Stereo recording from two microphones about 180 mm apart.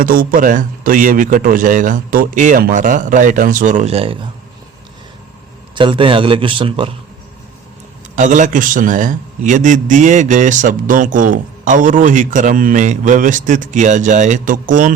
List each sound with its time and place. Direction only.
0.0 s a man's voice: 50° right (ahead or behind); by 4.3 s 30° right (ahead or behind)
5.7 s a man's voice: 25° right (ahead or behind)
8.1 s a man's voice: 45° right (ahead or behind)